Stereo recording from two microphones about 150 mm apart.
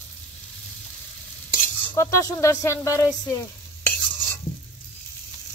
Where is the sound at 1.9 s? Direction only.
20° left (ahead or behind).